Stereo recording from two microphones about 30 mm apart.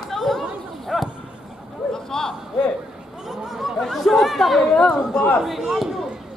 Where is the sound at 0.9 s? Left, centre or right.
Centre.